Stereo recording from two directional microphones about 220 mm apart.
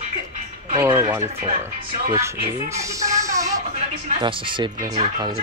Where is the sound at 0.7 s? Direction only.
15° right (ahead or behind).